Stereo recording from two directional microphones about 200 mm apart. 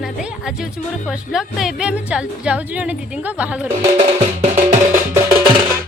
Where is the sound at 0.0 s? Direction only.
Centre (ahead or behind).